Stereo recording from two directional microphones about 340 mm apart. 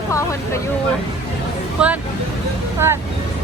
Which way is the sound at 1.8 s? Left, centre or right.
Centre.